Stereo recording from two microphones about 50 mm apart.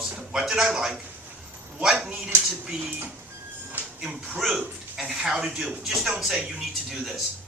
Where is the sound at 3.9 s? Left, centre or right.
Centre.